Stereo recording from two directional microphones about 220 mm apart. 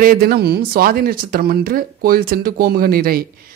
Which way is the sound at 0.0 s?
45° right (ahead or behind).